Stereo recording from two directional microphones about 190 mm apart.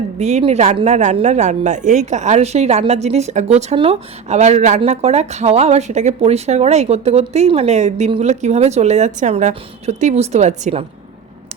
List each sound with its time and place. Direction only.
0.2 s speech: 35° right (ahead or behind)